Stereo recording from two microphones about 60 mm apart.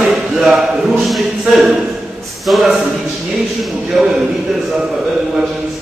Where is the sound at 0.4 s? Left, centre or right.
Centre.